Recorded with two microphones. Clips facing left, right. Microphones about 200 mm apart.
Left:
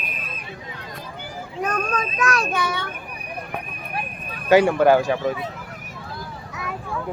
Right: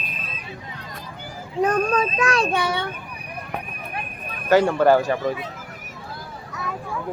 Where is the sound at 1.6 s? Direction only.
30° right (ahead or behind).